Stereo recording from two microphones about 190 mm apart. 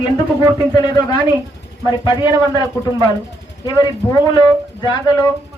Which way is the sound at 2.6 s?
20° left (ahead or behind).